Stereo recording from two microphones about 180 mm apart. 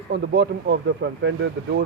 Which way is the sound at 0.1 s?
85° right.